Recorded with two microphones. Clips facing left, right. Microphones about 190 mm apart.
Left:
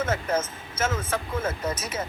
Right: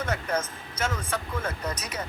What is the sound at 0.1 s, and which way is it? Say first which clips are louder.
Speech: left 3 dB; 25° left (ahead or behind).